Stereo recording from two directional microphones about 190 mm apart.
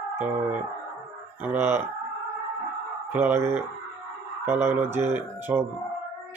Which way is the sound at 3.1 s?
10° right (ahead or behind).